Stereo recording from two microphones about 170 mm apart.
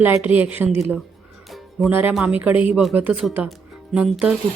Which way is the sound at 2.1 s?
5° right (ahead or behind).